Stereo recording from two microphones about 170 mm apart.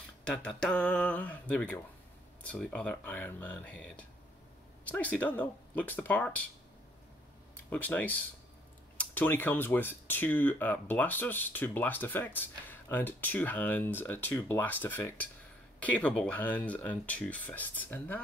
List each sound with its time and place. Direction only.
0.2 s speech: 5° left (ahead or behind)
7.7 s speech: 10° left (ahead or behind)